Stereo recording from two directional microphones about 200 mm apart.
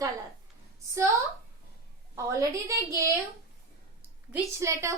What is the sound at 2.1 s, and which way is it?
Speech, 15° right (ahead or behind).